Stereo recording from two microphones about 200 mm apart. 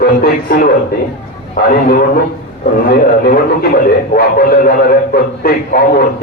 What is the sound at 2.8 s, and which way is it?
A man's voice, 45° left (ahead or behind).